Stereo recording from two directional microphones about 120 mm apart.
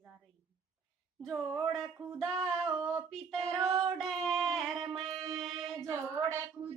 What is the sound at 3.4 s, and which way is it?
Mantra, 25° right (ahead or behind).